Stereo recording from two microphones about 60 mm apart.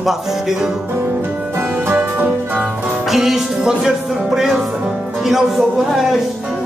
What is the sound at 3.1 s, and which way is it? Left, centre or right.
Music, centre.